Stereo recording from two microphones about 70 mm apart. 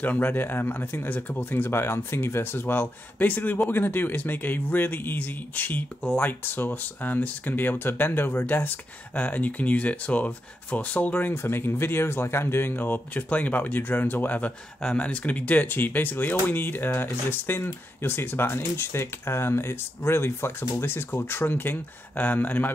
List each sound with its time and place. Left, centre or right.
0.0 s speech: left
11.3 s speech: left
14.8 s speech: centre